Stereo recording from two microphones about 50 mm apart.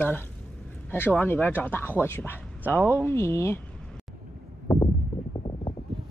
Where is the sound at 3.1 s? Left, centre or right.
Left.